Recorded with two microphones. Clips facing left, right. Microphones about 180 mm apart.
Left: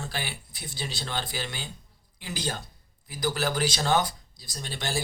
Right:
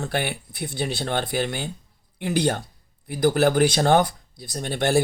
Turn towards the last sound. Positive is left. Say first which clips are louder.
# right 11 dB
turn(degrees=-60)  # may be behind; listen again after turning